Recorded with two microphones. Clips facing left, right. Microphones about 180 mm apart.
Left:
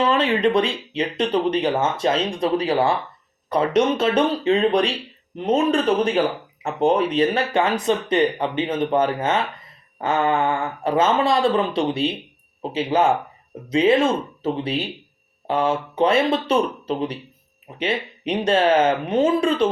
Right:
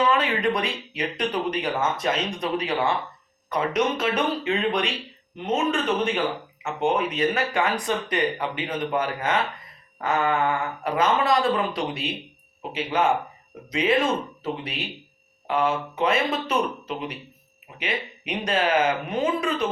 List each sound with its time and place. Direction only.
0.0 s speech: 30° left (ahead or behind)